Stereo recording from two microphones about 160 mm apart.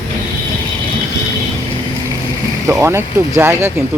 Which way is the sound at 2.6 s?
20° right (ahead or behind).